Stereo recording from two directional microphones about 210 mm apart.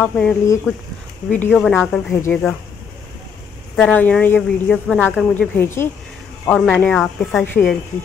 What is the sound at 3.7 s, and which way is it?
A woman's voice, 5° left (ahead or behind).